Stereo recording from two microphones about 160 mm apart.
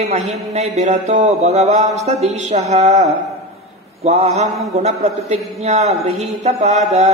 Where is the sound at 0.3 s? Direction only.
40° right (ahead or behind).